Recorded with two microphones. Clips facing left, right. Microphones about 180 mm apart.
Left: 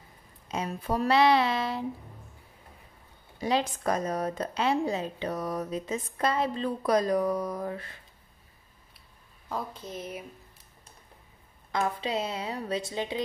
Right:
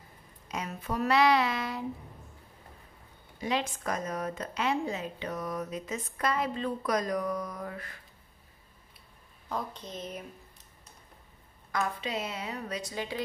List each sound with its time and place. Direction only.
0.5 s a woman's voice: 30° left (ahead or behind)
3.3 s a woman's voice: 35° left (ahead or behind)
9.5 s speech: 5° left (ahead or behind)
11.7 s a woman's voice: 30° left (ahead or behind)